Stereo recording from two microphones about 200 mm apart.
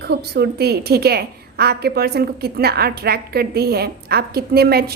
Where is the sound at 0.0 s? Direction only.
55° right (ahead or behind).